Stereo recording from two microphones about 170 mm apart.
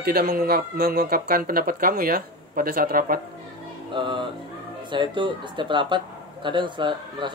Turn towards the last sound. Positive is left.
turn(degrees=-25)  # may be behind; listen again after turning